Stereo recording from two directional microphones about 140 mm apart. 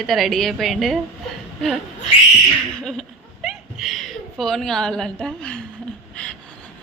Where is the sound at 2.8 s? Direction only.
5° left (ahead or behind).